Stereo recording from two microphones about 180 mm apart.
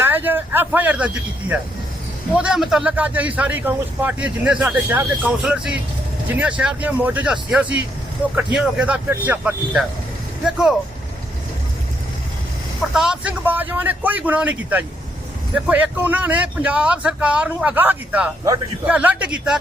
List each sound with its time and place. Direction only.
0.0 s speech: 10° right (ahead or behind)
12.9 s speech: 5° right (ahead or behind)